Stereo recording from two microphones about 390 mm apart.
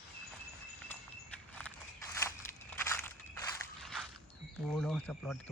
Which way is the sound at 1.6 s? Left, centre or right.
Centre.